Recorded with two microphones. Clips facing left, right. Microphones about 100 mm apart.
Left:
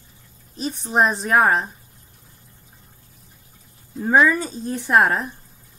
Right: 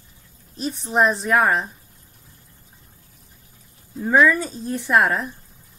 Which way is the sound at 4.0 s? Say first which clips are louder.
Even; 20° left (ahead or behind).